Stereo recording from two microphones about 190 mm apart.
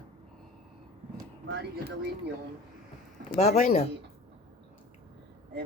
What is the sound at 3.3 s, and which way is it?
Speech, 35° left (ahead or behind).